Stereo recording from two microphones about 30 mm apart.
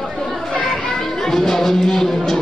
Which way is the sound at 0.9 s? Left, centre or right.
Centre.